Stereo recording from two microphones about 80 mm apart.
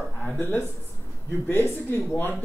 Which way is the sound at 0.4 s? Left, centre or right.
Left.